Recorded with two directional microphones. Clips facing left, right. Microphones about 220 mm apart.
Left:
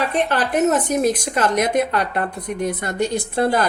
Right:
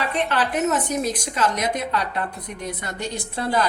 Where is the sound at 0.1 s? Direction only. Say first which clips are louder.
Left 3 dB; 45° left (ahead or behind).